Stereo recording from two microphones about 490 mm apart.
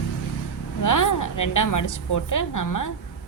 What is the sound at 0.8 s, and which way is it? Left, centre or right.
A woman's voice, left.